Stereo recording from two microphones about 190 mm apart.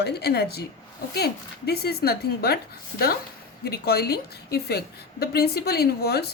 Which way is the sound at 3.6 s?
55° left (ahead or behind).